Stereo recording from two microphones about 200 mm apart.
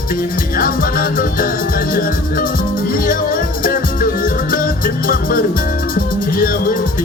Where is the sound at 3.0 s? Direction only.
45° left (ahead or behind).